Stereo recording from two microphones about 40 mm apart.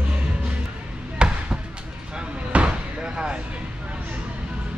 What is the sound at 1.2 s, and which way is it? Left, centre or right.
Basketball bounce, right.